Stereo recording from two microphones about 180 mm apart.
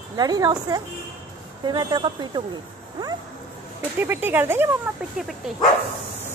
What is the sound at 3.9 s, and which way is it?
A child's voice, 10° right (ahead or behind).